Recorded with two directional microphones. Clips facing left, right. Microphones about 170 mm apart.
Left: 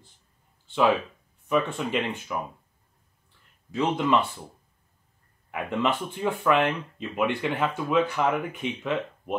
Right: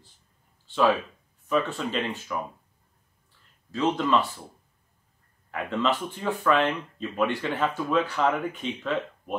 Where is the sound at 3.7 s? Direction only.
20° left (ahead or behind).